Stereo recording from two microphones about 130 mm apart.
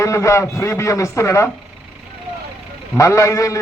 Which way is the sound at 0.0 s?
25° left (ahead or behind).